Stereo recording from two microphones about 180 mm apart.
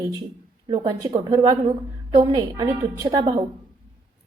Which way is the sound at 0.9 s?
20° right (ahead or behind).